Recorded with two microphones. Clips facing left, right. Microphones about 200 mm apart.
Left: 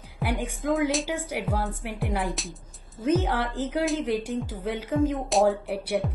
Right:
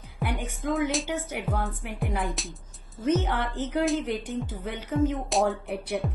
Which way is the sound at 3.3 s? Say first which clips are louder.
Left 2 dB; 90° left.